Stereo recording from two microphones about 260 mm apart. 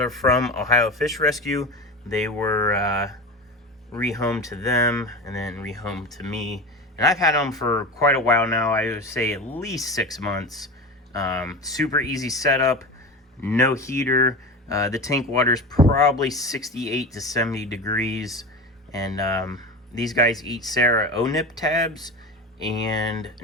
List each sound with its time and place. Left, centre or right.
0.1 s speech: centre
5.5 s speech: centre
7.0 s speech: centre
18.1 s speech: centre
18.9 s speech: centre
20.3 s speech: centre
20.7 s speech: centre